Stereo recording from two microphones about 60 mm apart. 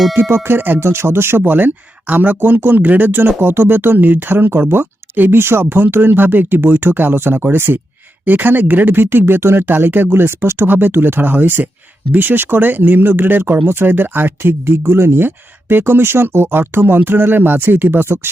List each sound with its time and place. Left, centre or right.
0.2 s speech: right